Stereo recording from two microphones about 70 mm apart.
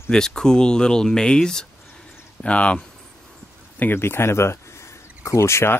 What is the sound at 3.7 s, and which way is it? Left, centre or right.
Speech, left.